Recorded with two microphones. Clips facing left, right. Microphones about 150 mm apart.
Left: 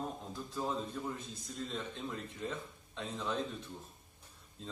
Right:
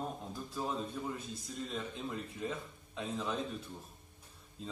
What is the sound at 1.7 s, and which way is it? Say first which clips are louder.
A man's voice: right 2 dB; 5° right (ahead or behind).